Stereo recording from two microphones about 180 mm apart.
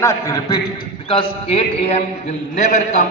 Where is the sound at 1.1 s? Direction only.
30° left (ahead or behind).